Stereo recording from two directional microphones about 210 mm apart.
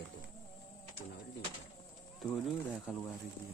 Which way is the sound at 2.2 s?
Centre (ahead or behind).